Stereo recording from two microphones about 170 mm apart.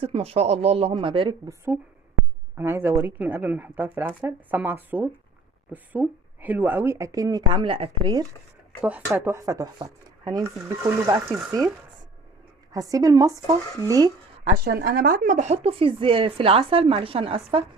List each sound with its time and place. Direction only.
0.0 s speech: 35° right (ahead or behind)
1.5 s speech: 15° right (ahead or behind); by 8.1 s 30° right (ahead or behind)
8.8 s speech: 10° right (ahead or behind)
12.7 s speech: 20° right (ahead or behind)
14.4 s speech: 60° right (ahead or behind); by 17.6 s 30° right (ahead or behind)